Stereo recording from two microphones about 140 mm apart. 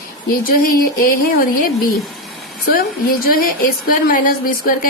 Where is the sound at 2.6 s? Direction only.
90° left.